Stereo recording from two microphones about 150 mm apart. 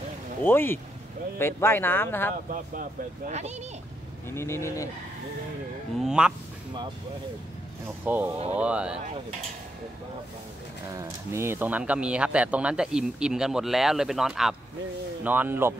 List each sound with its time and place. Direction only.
0.4 s speech: 15° left (ahead or behind)
2.5 s speech: 65° right (ahead or behind); by 3.5 s 50° right (ahead or behind)
4.3 s speech: 20° left (ahead or behind)
5.9 s speech: 5° right (ahead or behind)
8.0 s speech: 10° right (ahead or behind)
11.0 s speech: 15° right (ahead or behind)